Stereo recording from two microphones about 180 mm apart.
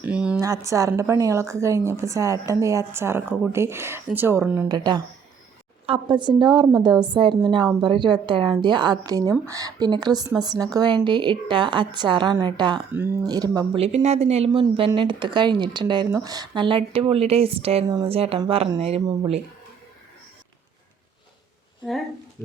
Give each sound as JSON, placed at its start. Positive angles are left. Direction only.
{"t": 0.0, "sound": "a sound", "side_deg": -5}
{"t": 0.3, "sound": "a woman's voice", "side_deg": -20}
{"t": 4.7, "sound": "speech", "side_deg": -20}
{"t": 13.7, "sound": "speech", "side_deg": -35}